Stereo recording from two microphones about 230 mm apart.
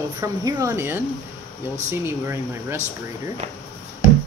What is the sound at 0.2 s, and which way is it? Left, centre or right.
Speech, centre.